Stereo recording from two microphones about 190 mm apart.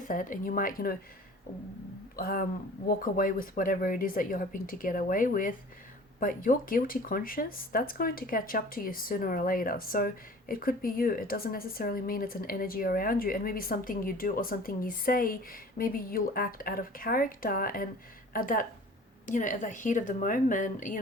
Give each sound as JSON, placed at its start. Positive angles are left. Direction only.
{"t": 0.1, "sound": "speech", "side_deg": 45}
{"t": 2.1, "sound": "speech", "side_deg": 50}